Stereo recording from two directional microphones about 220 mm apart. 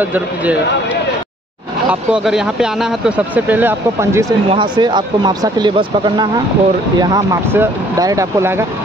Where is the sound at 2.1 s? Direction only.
5° right (ahead or behind).